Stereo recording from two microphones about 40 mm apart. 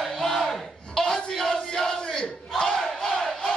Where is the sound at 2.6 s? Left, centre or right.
Centre.